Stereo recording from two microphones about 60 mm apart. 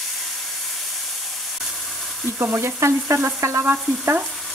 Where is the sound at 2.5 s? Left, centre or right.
Right.